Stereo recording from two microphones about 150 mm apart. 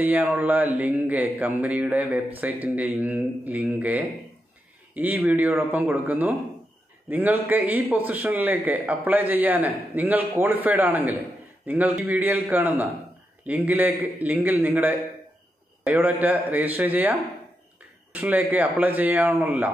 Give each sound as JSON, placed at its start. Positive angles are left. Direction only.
{"t": 0.0, "sound": "a man's voice", "side_deg": -10}